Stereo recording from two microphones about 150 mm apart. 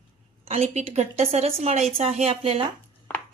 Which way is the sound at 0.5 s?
45° right (ahead or behind).